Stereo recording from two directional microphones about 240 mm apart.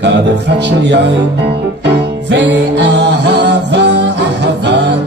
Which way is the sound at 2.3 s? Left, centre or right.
Right.